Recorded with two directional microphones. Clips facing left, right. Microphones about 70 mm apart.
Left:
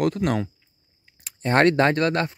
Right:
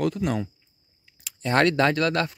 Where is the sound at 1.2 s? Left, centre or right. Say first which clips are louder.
Left 3 dB; left.